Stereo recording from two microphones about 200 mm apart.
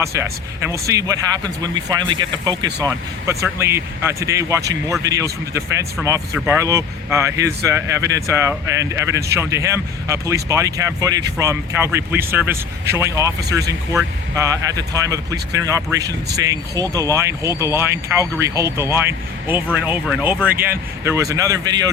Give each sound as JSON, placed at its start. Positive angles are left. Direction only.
{"t": 0.0, "sound": "speech", "side_deg": -15}